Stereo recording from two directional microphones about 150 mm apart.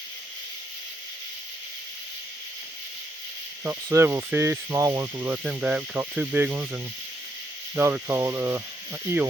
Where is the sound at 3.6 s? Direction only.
15° right (ahead or behind).